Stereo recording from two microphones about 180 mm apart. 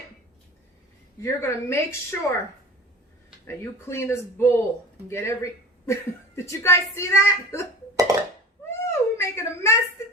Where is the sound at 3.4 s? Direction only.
15° left (ahead or behind).